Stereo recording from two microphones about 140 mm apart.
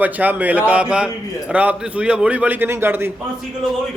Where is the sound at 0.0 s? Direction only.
10° right (ahead or behind).